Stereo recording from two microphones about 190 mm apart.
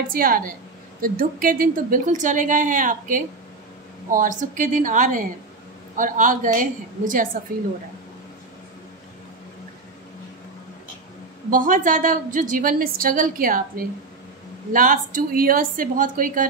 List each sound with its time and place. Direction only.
0.1 s a woman's voice: 50° right (ahead or behind)
11.5 s a woman's voice: 45° right (ahead or behind)